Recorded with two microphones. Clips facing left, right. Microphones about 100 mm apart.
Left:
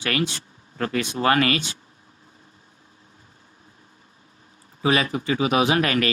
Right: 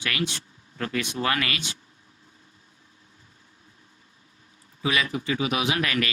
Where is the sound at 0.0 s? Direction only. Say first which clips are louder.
Left 4 dB; 40° left (ahead or behind).